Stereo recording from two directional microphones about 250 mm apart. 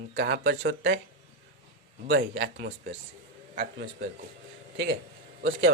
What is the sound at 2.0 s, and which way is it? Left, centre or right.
A man's voice, right.